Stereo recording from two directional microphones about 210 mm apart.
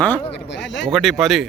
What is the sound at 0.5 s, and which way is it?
Speech, 55° left (ahead or behind).